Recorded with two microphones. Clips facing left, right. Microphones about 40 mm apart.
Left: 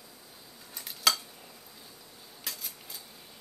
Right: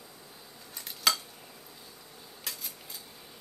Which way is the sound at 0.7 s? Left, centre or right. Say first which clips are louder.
Left 1 dB; centre.